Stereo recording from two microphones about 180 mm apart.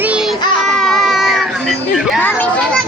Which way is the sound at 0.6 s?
Centre (ahead or behind).